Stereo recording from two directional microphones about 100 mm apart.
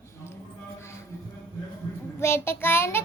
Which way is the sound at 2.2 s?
25° left (ahead or behind).